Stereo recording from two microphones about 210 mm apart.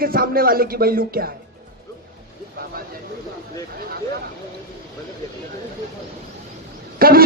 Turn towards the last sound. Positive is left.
turn(degrees=-45)  # may be behind; listen again after turning